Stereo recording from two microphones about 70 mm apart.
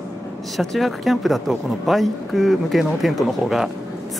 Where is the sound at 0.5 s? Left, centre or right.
Centre.